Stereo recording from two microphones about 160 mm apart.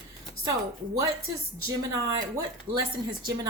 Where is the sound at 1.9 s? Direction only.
20° right (ahead or behind).